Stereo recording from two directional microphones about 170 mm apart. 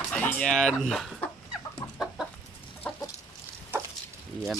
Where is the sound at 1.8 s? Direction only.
25° left (ahead or behind).